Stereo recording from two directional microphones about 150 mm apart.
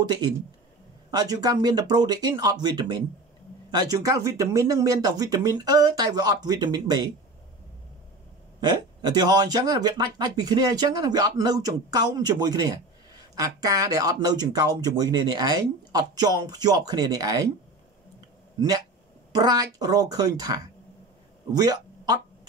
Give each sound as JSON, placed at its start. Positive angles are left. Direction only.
{"t": 1.1, "sound": "speech", "side_deg": -25}
{"t": 8.5, "sound": "speech", "side_deg": -30}
{"t": 19.3, "sound": "speech", "side_deg": -25}